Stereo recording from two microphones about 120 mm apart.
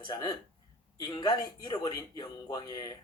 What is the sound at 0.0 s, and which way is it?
Speech, 35° left (ahead or behind).